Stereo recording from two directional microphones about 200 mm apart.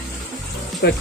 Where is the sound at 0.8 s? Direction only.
50° left (ahead or behind).